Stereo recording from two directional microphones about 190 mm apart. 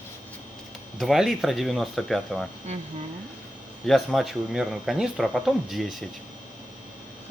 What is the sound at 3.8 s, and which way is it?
Speech, centre (ahead or behind).